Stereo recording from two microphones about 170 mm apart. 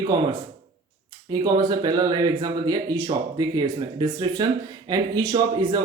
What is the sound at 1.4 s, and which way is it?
Speech, 20° right (ahead or behind).